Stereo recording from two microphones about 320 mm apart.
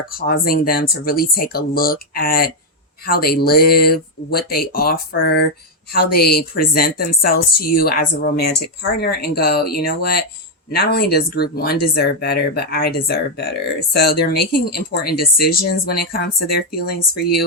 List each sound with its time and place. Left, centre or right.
0.2 s speech: left